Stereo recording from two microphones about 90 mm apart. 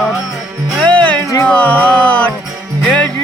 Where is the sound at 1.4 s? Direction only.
15° left (ahead or behind).